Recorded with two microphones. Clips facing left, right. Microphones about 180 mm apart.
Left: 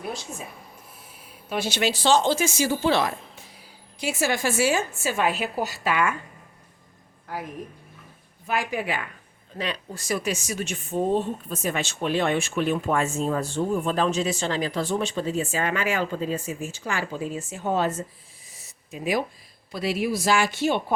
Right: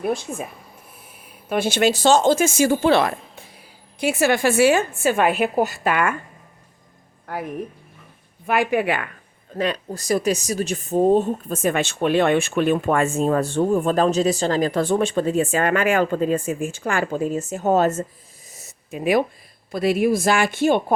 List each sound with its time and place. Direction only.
0.0 s a woman's voice: 55° right (ahead or behind)
1.5 s a woman's voice: 55° right (ahead or behind)
7.3 s a woman's voice: 60° right (ahead or behind)
8.4 s a woman's voice: 60° right (ahead or behind)
9.6 s speech: 45° right (ahead or behind)
18.4 s a sound: 45° right (ahead or behind); by 19.2 s 60° right (ahead or behind)
19.7 s speech: 50° right (ahead or behind)